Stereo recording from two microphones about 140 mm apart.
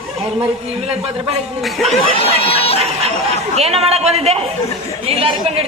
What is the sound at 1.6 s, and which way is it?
Speech, centre (ahead or behind).